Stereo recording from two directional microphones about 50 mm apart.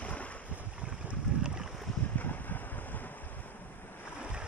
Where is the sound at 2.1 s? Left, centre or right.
Left.